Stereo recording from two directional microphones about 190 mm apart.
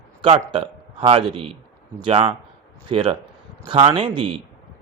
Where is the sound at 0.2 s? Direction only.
30° right (ahead or behind).